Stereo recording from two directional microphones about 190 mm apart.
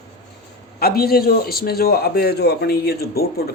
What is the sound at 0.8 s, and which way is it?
A man's voice, 55° left (ahead or behind).